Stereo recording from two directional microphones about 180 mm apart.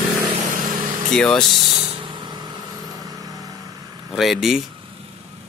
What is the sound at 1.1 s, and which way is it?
Speech, centre (ahead or behind).